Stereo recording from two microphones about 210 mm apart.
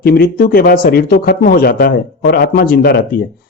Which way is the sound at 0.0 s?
45° left (ahead or behind).